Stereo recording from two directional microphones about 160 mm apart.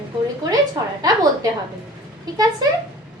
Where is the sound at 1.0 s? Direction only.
25° right (ahead or behind).